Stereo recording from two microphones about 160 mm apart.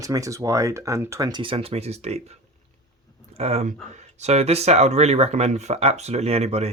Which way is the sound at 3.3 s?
40° right (ahead or behind).